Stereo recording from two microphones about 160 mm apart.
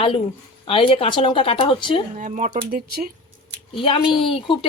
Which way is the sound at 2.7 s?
65° right (ahead or behind).